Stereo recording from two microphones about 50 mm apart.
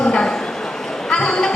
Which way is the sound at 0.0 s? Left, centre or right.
Centre.